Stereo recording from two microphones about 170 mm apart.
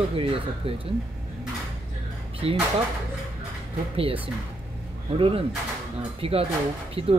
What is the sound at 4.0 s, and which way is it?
Speech, 35° right (ahead or behind).